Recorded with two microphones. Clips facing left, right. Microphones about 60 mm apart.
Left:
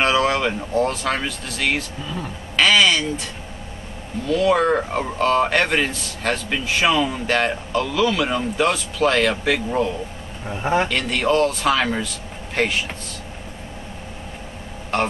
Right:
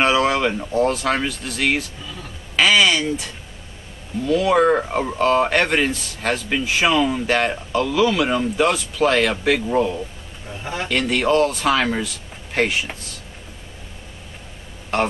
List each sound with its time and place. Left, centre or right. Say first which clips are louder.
0.0 s speech: right 1 dB; centre
2.5 s a sound: even; centre
4.3 s speech: right 1 dB; centre
10.5 s speech: left 8 dB; left
10.9 s speech: right 1 dB; centre
14.9 s burping: right 1 dB; centre